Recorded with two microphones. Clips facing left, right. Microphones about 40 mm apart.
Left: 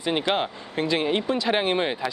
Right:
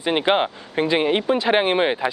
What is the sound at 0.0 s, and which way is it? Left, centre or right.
Speech, right.